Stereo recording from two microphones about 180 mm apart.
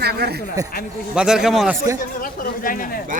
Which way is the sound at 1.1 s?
5° right (ahead or behind).